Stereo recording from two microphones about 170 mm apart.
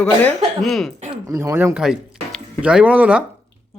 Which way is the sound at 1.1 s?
20° right (ahead or behind).